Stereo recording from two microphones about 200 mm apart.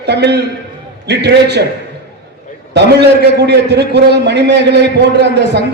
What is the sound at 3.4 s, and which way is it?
A man's voice, 55° right (ahead or behind).